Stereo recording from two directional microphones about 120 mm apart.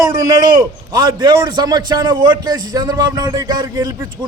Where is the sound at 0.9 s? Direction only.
35° right (ahead or behind).